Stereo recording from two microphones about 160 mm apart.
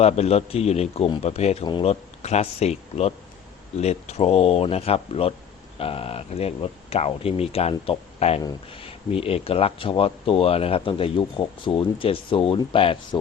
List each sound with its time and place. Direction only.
0.0 s speech: 40° left (ahead or behind)